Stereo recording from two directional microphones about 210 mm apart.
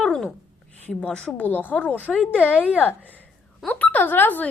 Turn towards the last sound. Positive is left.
turn(degrees=10)  # may be behind; listen again after turning